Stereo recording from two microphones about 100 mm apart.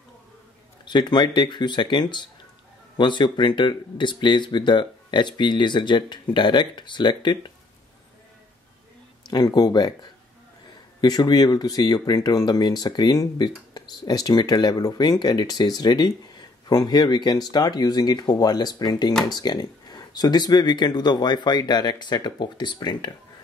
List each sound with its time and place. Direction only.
0.8 s speech: 50° left (ahead or behind)
9.3 s speech: 45° left (ahead or behind)
11.0 s speech: 40° left (ahead or behind)